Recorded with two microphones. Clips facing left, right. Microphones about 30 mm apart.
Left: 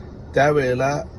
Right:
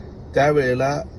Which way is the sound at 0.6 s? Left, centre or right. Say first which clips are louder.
Right 1 dB; centre.